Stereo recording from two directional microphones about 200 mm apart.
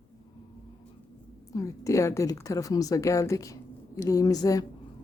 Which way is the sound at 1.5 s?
15° left (ahead or behind).